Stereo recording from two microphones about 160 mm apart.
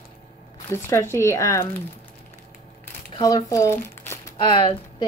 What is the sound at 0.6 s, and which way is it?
Speech, 15° left (ahead or behind).